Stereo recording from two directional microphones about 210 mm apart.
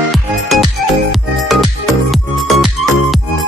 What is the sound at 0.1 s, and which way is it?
Music, centre (ahead or behind).